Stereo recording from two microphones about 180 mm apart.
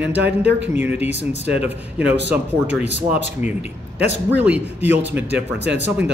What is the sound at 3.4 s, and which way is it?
Speech, 40° left (ahead or behind).